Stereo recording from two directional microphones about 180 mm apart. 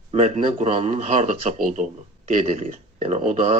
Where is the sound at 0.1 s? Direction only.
40° right (ahead or behind).